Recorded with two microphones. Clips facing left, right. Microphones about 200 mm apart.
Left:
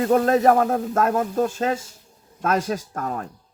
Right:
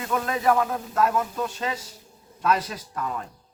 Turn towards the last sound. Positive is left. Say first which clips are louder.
# left 3 dB
turn(degrees=50)  # may be behind; listen again after turning